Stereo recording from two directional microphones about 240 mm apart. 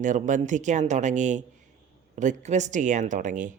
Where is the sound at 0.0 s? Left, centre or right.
Right.